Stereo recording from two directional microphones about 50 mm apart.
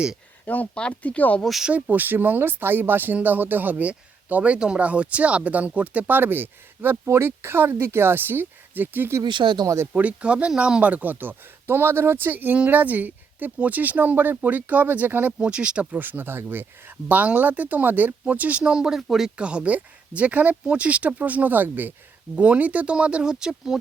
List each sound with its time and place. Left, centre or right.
0.4 s speech: left
0.7 s speech: left
1.4 s speech: centre
1.7 s speech: right
9.6 s speech: right
10.0 s speech: right
15.4 s speech: right
19.4 s speech: right
22.4 s speech: right; by 23.7 s centre